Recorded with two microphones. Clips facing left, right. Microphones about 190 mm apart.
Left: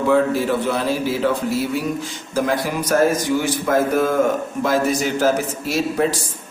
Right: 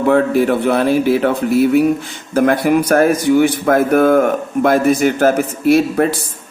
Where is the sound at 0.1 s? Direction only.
60° right (ahead or behind).